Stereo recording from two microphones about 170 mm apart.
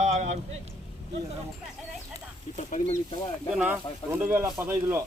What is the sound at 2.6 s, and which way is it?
Speech, 45° left (ahead or behind).